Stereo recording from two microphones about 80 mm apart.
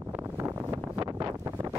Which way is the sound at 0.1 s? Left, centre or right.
Right.